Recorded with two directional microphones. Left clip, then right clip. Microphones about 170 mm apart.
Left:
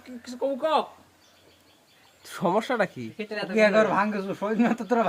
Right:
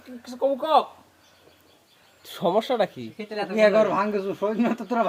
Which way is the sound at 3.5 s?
50° left (ahead or behind).